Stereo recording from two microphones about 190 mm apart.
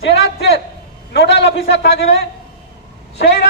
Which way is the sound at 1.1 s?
65° left (ahead or behind).